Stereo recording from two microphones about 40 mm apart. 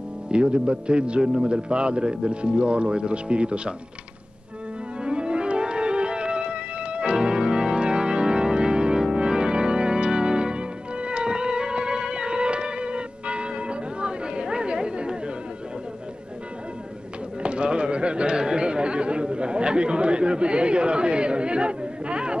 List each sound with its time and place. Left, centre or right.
0.3 s speech: right
5.0 s music: right
9.1 s organ: right
17.4 s a sound: right